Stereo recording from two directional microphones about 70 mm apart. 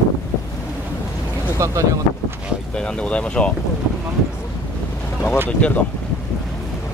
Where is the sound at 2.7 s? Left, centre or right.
Centre.